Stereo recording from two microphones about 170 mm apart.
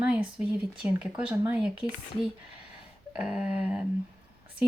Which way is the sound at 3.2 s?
5° right (ahead or behind).